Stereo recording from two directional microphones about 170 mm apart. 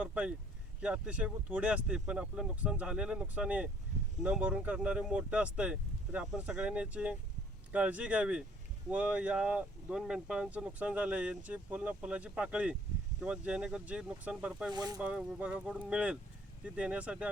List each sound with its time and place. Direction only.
0.0 s speech: 5° right (ahead or behind)
14.7 s speech: 25° right (ahead or behind)
15.0 s speech: 5° right (ahead or behind)